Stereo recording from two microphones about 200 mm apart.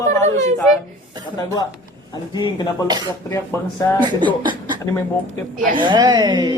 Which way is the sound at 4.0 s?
25° right (ahead or behind).